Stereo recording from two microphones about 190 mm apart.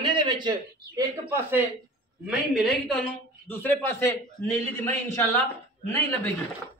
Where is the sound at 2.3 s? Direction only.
Centre (ahead or behind).